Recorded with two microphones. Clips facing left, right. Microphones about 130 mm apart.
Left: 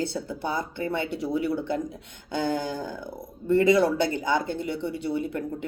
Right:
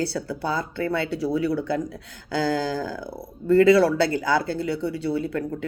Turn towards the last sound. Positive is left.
turn(degrees=20)  # may be behind; listen again after turning